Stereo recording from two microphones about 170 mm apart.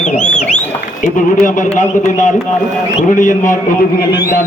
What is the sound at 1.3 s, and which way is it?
A man's voice, 50° left (ahead or behind).